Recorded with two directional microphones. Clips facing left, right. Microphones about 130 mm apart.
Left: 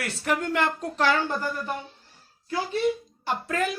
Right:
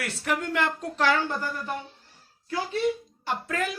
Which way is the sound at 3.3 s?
30° left (ahead or behind).